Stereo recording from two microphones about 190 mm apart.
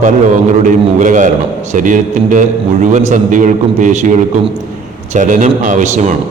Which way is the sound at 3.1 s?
40° right (ahead or behind).